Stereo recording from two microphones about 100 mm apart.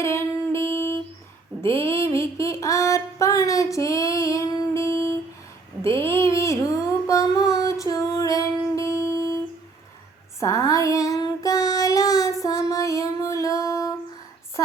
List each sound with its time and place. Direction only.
0.0 s music: 25° left (ahead or behind)
1.6 s a sound: 25° left (ahead or behind)
7.1 s music: 35° left (ahead or behind)
10.4 s child singing: 30° left (ahead or behind)
12.4 s music: 35° left (ahead or behind)